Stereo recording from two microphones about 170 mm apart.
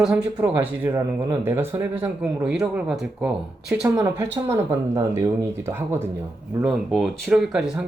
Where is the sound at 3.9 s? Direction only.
15° right (ahead or behind).